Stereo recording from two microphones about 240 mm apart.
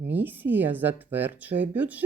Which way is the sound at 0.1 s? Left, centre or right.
Centre.